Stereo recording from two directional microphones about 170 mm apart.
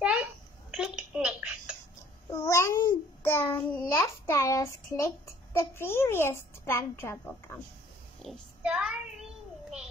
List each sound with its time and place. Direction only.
0.0 s a sound: 5° right (ahead or behind)
2.3 s child singing: 15° left (ahead or behind)
3.9 s a child's voice: 15° left (ahead or behind)
8.2 s a child's voice: 5° right (ahead or behind)